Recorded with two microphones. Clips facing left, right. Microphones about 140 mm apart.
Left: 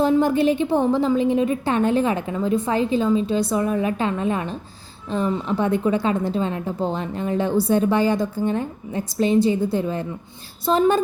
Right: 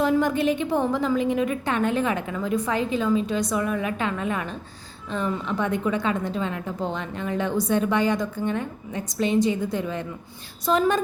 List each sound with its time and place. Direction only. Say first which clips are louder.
0.0 s a woman's voice: left 4 dB; 30° left (ahead or behind)